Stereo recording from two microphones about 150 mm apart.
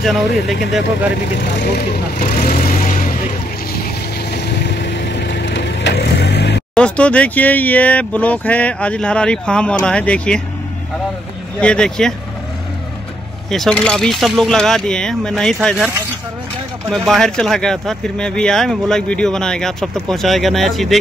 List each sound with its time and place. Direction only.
0.0 s speech: centre (ahead or behind)
1.7 s speech: 90° left; by 3.2 s 65° left (ahead or behind)
4.3 s vehicle: 90° left
5.9 s vehicle: 90° left
6.7 s speech: 5° left (ahead or behind)
11.6 s speech: 5° left (ahead or behind)
13.5 s speech: 5° left (ahead or behind)
16.9 s speech: centre (ahead or behind)